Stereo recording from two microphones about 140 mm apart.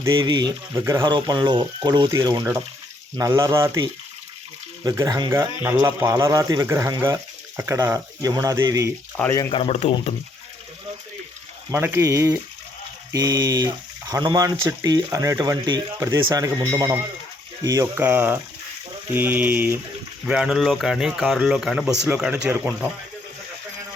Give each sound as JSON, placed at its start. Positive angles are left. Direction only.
{"t": 0.1, "sound": "speech", "side_deg": -35}
{"t": 0.8, "sound": "speech", "side_deg": -20}
{"t": 1.0, "sound": "speech", "side_deg": -30}
{"t": 4.8, "sound": "speech", "side_deg": -25}
{"t": 9.5, "sound": "speech", "side_deg": 45}
{"t": 11.7, "sound": "speech", "side_deg": -15}
{"t": 18.0, "sound": "speech", "side_deg": -15}